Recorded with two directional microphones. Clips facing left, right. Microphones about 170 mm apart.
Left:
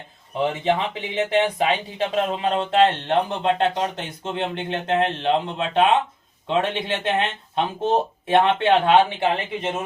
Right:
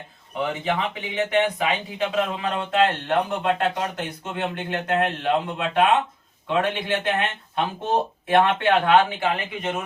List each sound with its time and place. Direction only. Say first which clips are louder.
0.4 s speech: left 3 dB; 30° left (ahead or behind)